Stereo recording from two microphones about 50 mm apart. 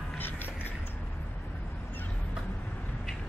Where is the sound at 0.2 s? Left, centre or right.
Left.